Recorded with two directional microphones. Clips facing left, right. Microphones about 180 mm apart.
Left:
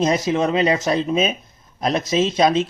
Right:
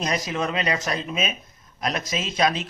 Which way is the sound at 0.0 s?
25° left (ahead or behind).